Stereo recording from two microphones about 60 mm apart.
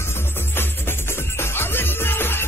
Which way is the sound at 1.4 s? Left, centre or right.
Left.